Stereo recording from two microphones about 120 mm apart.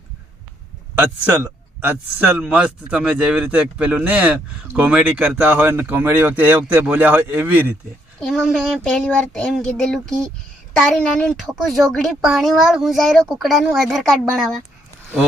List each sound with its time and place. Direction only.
1.4 s speech: 20° right (ahead or behind)
8.2 s a woman's voice: 5° left (ahead or behind)